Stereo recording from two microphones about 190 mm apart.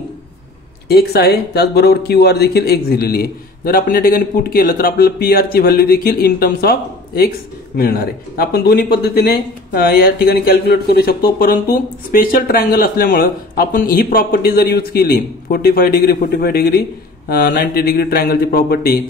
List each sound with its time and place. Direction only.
0.8 s speech: 55° left (ahead or behind)